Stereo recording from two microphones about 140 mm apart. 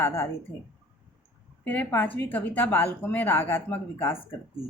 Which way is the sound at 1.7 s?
15° left (ahead or behind).